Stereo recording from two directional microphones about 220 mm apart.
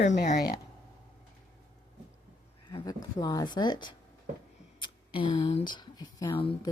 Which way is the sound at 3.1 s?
15° left (ahead or behind).